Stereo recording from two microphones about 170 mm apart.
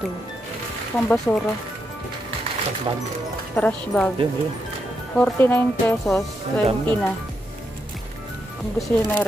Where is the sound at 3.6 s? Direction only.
10° left (ahead or behind).